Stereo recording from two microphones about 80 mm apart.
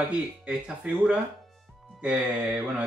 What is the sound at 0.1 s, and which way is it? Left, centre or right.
Speech, centre.